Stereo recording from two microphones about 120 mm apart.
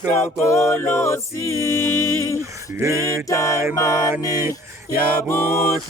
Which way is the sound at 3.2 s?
25° left (ahead or behind).